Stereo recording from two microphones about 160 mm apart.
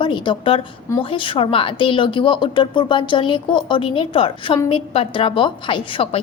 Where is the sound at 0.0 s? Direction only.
30° left (ahead or behind).